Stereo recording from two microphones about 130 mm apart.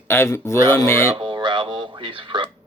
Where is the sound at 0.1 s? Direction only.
20° left (ahead or behind).